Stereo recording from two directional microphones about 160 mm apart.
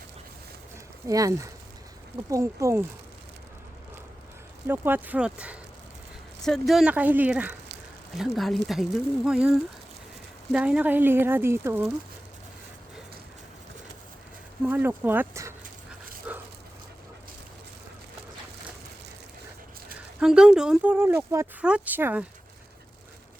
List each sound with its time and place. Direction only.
1.0 s speech: 20° right (ahead or behind)
4.6 s speech: 15° right (ahead or behind)
14.6 s speech: 10° right (ahead or behind)
16.3 s dog: 10° right (ahead or behind)
20.1 s speech: 5° right (ahead or behind)